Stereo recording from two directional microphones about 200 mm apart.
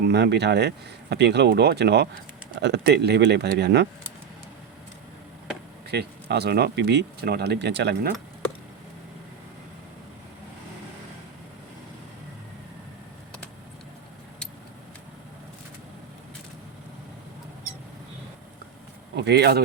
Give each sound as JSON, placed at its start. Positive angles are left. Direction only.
{"t": 0.0, "sound": "speech", "side_deg": -55}
{"t": 5.9, "sound": "speech", "side_deg": -55}
{"t": 19.1, "sound": "speech", "side_deg": -55}